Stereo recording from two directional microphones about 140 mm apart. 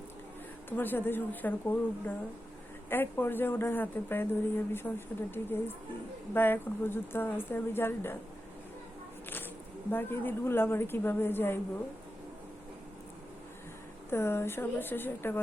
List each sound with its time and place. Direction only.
0.8 s speech: 15° left (ahead or behind)
9.9 s speech: 15° left (ahead or behind)
14.1 s speech: 15° left (ahead or behind)